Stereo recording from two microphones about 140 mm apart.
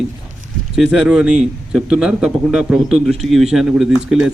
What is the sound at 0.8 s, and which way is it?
A man's voice, 5° right (ahead or behind).